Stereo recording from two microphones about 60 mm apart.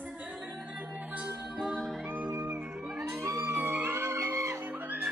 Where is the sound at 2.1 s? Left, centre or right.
Right.